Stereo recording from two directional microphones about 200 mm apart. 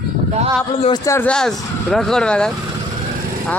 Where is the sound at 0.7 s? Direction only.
30° left (ahead or behind).